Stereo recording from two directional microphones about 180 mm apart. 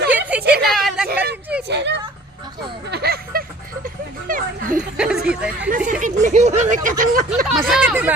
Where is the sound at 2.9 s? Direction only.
60° right (ahead or behind).